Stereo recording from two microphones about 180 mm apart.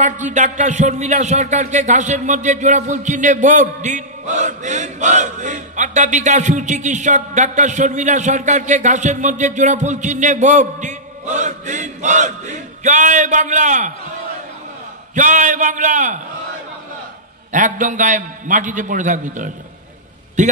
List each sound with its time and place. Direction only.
0.0 s speech: 40° right (ahead or behind)
15.1 s a man's voice: 45° right (ahead or behind)
17.5 s a man's voice: 45° right (ahead or behind)